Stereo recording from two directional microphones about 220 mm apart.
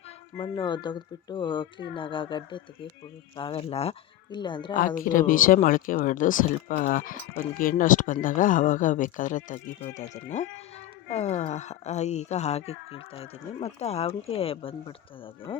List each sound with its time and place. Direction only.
0.3 s speech: 20° left (ahead or behind)
4.7 s speech: 40° left (ahead or behind)
11.1 s speech: 30° left (ahead or behind)